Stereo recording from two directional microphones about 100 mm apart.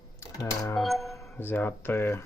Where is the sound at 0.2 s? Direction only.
35° left (ahead or behind).